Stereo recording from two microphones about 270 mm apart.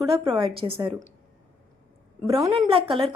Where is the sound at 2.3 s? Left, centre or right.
Centre.